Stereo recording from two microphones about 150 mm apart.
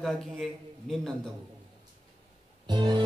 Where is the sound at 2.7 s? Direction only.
30° right (ahead or behind).